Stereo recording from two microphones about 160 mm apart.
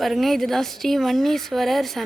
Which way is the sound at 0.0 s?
Centre (ahead or behind).